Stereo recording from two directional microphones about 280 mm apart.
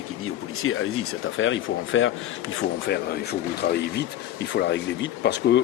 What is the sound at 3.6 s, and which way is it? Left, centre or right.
Speech, left.